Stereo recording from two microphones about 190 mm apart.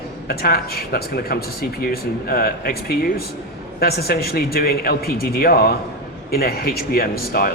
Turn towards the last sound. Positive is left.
turn(degrees=50)  # may be behind; listen again after turning